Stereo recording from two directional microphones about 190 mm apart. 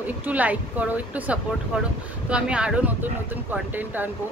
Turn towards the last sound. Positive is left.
turn(degrees=-10)  # may be behind; listen again after turning